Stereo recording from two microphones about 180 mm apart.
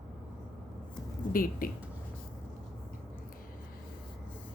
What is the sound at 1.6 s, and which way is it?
Speech, 50° left (ahead or behind).